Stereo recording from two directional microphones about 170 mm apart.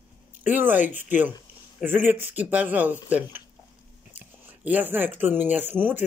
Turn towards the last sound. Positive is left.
turn(degrees=-10)  # may be behind; listen again after turning